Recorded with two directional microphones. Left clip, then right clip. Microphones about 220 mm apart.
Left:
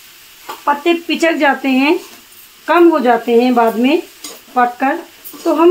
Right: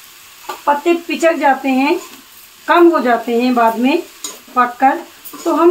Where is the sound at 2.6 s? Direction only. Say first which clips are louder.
Even; 25° left (ahead or behind).